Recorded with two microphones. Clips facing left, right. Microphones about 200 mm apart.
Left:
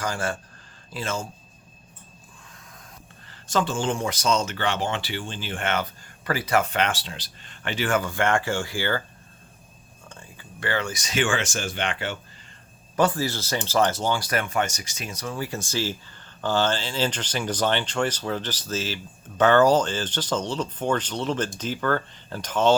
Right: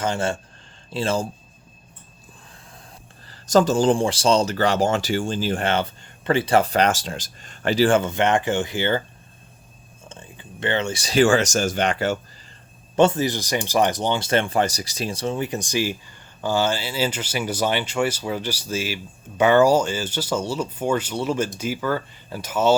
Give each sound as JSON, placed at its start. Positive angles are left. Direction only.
{"t": 0.0, "sound": "speech", "side_deg": -25}
{"t": 3.2, "sound": "speech", "side_deg": -40}
{"t": 10.1, "sound": "speech", "side_deg": -20}
{"t": 13.0, "sound": "speech", "side_deg": -20}